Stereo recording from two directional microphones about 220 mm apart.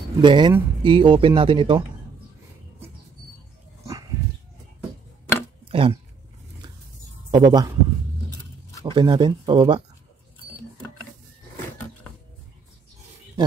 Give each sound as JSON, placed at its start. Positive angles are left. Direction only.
{"t": 0.2, "sound": "speech", "side_deg": -20}
{"t": 5.7, "sound": "a sound", "side_deg": -25}
{"t": 7.2, "sound": "speech", "side_deg": -20}
{"t": 8.8, "sound": "speech", "side_deg": -20}